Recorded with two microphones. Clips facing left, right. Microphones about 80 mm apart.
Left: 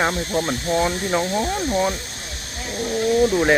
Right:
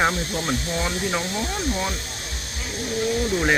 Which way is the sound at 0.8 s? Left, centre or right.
Centre.